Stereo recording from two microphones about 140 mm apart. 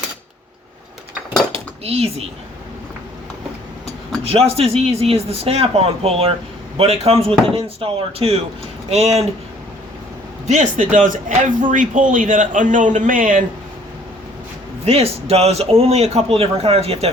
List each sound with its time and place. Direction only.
1.5 s cutlery: 45° right (ahead or behind)
4.2 s a man's voice: 45° right (ahead or behind)
10.4 s a man's voice: 60° right (ahead or behind)
14.8 s a man's voice: 45° right (ahead or behind)